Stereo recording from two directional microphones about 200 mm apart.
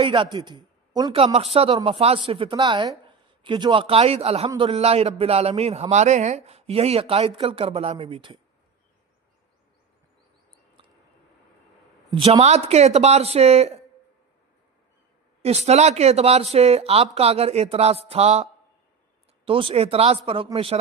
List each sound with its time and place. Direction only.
0.0 s a man's voice: 25° right (ahead or behind)
12.1 s speech: 30° right (ahead or behind)
15.4 s speech: 30° right (ahead or behind)
19.5 s a man's voice: 25° right (ahead or behind)